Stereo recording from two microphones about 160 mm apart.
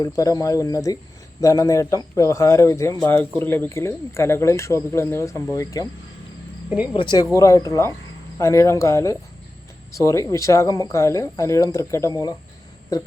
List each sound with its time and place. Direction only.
0.0 s speech: 20° left (ahead or behind)
6.9 s speech: 30° left (ahead or behind)